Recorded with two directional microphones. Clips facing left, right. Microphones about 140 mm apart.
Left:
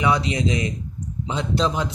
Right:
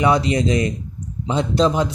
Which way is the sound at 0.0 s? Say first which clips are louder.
Right 4 dB; 40° right (ahead or behind).